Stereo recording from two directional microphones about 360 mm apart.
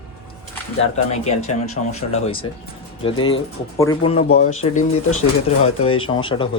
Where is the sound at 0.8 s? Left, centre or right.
Centre.